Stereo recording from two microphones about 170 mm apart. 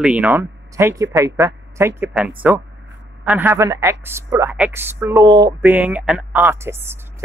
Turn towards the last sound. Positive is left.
turn(degrees=-15)  # may be behind; listen again after turning